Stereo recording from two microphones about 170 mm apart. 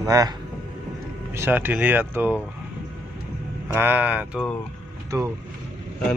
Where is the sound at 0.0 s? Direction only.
20° right (ahead or behind).